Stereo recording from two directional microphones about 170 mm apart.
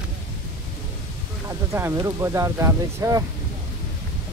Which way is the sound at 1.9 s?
20° right (ahead or behind).